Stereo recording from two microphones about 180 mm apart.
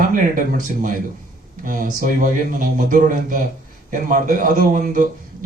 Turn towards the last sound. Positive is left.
turn(degrees=-45)  # may be behind; listen again after turning